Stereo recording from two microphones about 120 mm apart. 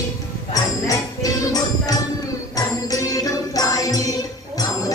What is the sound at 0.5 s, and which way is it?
Music, 30° left (ahead or behind).